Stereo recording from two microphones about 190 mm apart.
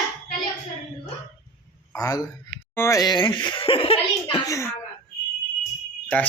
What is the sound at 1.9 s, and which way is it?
A man's voice, 20° left (ahead or behind).